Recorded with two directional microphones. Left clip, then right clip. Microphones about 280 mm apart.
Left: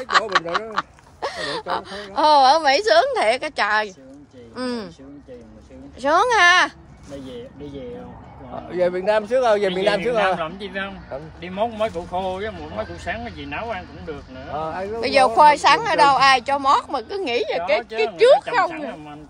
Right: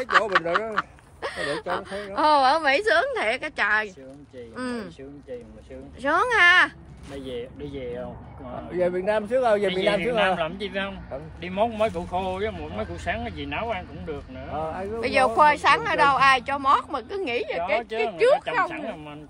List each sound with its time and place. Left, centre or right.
0.3 s a woman's voice: centre
5.9 s a woman's voice: centre
7.2 s speech: right
8.6 s a man's voice: left
10.4 s a woman's voice: centre